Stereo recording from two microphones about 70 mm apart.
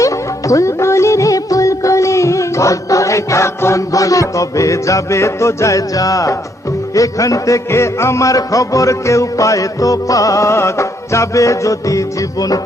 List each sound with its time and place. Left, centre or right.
0.0 s music: left